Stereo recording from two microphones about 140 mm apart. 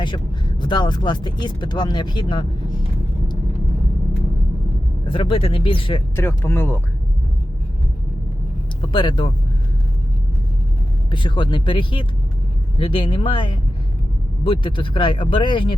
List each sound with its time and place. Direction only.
0.6 s speech: 30° left (ahead or behind)
5.0 s speech: 40° left (ahead or behind)
6.1 s speech: 15° left (ahead or behind)
8.8 s speech: 35° left (ahead or behind)
11.1 s speech: 35° left (ahead or behind)